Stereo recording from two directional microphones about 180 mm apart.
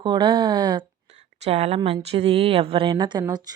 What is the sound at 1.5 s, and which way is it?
Speech, 35° right (ahead or behind).